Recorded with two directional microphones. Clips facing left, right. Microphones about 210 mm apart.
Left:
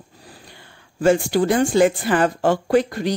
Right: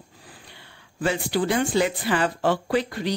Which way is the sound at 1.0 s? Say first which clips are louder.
Left 7 dB; 45° left (ahead or behind).